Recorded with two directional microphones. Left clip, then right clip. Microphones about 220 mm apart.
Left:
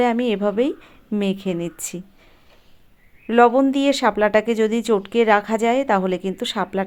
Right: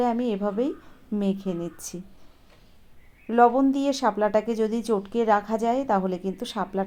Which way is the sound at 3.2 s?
30° left (ahead or behind).